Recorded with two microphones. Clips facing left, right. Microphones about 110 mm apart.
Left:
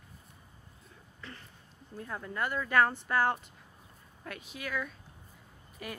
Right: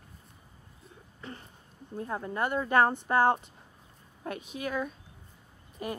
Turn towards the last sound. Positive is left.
turn(degrees=-25)  # may be behind; listen again after turning